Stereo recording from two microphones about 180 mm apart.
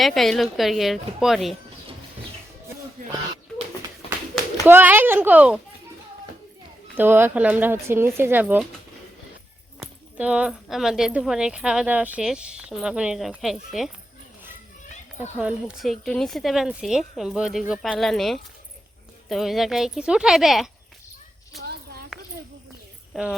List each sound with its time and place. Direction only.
0.0 s speech: centre (ahead or behind)
4.6 s speech: 10° right (ahead or behind)
6.9 s speech: 10° right (ahead or behind)
9.8 s speech: 5° right (ahead or behind)
15.2 s speech: 5° right (ahead or behind)
21.7 s a sound: 60° right (ahead or behind)
23.1 s speech: centre (ahead or behind)